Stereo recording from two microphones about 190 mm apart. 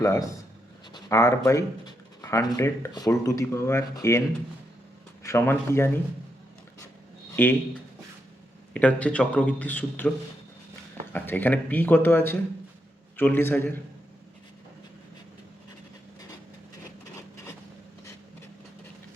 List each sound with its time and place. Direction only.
0.0 s speech: 15° left (ahead or behind)
5.2 s speech: 15° left (ahead or behind)
7.4 s speech: 10° left (ahead or behind)
8.7 s speech: 5° left (ahead or behind)
11.1 s speech: 10° left (ahead or behind)
17.2 s a sound: 15° left (ahead or behind)